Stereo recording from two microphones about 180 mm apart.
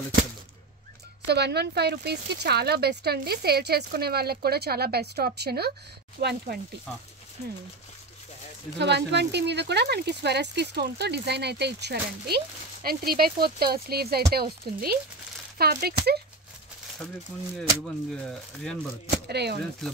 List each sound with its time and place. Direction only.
1.2 s speech: 65° right (ahead or behind)
8.7 s speech: 70° right (ahead or behind)
17.6 s speech: 5° left (ahead or behind)
19.2 s speech: 65° right (ahead or behind)